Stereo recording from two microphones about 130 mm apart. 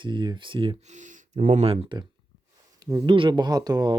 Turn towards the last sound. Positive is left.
turn(degrees=-30)  # may be behind; listen again after turning